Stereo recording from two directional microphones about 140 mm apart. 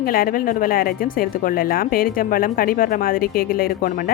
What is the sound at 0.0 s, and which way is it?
A woman's voice, 90° left.